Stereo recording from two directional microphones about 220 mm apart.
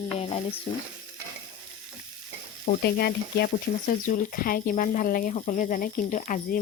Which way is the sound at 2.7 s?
45° left (ahead or behind).